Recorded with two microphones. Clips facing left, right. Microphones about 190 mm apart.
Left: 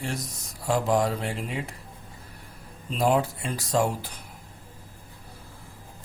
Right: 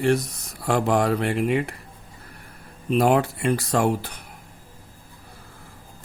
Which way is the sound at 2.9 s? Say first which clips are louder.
Right 4 dB; 65° right (ahead or behind).